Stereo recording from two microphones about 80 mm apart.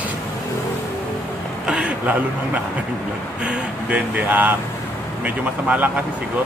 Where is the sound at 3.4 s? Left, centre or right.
Centre.